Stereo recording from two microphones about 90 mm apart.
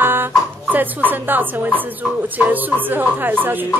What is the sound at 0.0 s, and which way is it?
Speech, 25° right (ahead or behind).